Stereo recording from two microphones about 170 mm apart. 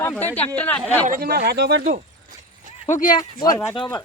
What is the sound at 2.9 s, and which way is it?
Speech, 50° left (ahead or behind).